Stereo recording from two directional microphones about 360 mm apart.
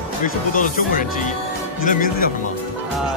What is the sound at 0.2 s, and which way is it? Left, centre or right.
Speech, left.